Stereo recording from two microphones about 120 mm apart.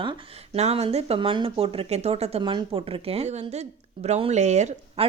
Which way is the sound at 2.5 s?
50° right (ahead or behind).